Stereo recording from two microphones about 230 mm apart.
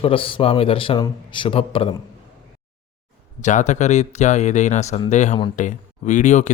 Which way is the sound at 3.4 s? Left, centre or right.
Left.